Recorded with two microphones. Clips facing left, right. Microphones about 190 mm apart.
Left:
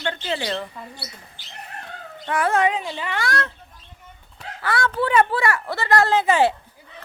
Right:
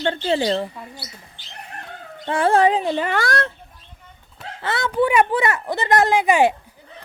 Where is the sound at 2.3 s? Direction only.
30° right (ahead or behind).